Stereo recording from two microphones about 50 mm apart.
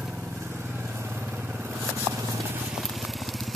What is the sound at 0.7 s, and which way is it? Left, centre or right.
Vehicle, right.